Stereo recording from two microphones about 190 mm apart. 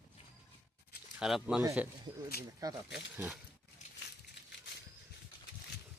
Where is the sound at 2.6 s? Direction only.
20° right (ahead or behind).